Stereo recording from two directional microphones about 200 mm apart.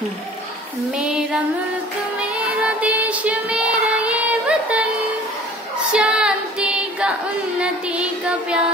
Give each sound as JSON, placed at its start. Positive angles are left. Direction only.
{"t": 0.9, "sound": "female singing", "side_deg": -5}
{"t": 2.1, "sound": "music", "side_deg": -5}
{"t": 5.9, "sound": "female singing", "side_deg": -5}